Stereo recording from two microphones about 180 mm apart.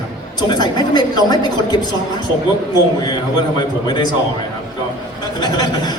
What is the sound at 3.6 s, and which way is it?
Speech, 25° left (ahead or behind).